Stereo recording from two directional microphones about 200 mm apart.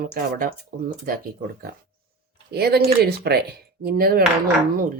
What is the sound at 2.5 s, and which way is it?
Speech, 50° right (ahead or behind).